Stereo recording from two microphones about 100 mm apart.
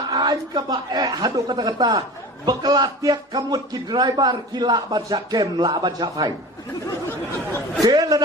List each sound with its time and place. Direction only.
0.1 s speech: 45° right (ahead or behind)
7.8 s a man's voice: 40° right (ahead or behind)